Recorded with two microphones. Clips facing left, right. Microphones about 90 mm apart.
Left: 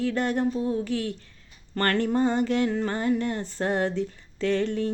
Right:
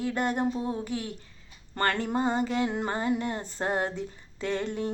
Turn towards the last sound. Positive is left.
turn(degrees=-15)  # may be behind; listen again after turning